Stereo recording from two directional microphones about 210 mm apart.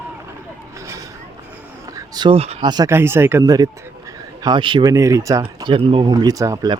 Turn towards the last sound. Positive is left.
turn(degrees=-20)  # may be behind; listen again after turning